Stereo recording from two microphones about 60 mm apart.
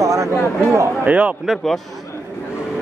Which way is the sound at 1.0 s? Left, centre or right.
Right.